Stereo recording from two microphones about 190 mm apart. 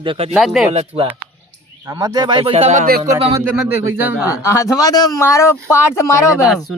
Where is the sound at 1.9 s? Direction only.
20° right (ahead or behind); by 2.9 s 35° right (ahead or behind).